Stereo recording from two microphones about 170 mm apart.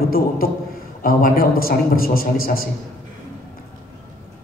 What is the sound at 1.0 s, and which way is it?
Speech, 60° left (ahead or behind).